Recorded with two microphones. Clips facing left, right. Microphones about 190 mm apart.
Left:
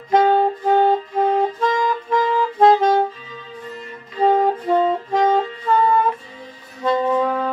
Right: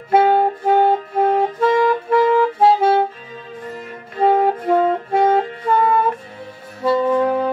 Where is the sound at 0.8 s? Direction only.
50° right (ahead or behind).